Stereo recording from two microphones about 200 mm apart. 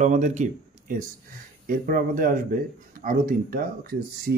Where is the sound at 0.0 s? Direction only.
40° right (ahead or behind).